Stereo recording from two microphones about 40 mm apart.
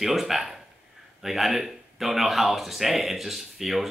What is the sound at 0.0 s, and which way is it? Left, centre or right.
Speech, centre.